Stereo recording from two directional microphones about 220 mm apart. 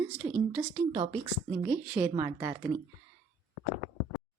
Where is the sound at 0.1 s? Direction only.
5° right (ahead or behind).